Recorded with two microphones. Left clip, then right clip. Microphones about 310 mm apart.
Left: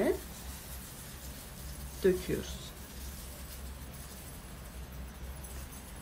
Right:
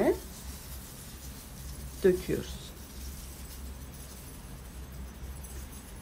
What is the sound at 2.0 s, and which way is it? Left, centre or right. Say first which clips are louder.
Speech: right 3 dB; centre.